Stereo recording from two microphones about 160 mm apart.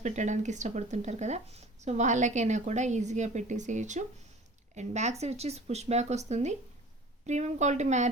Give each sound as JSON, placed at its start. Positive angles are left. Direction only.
{"t": 0.0, "sound": "speech", "side_deg": -50}